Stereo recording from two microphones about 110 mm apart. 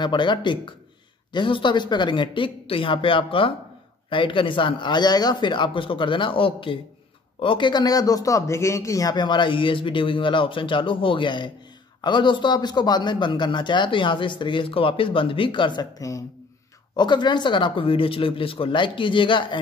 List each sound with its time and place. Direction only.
0.0 s a man's voice: 45° left (ahead or behind)